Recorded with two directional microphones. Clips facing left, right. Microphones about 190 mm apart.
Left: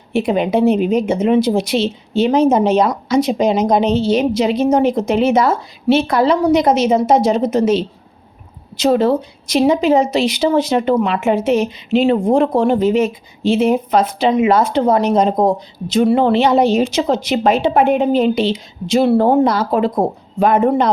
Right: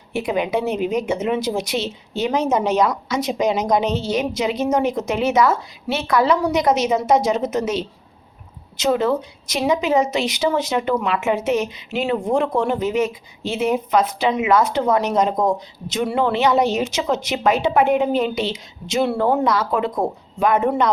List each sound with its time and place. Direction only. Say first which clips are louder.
0.1 s a woman's voice: left 5 dB; 30° left (ahead or behind)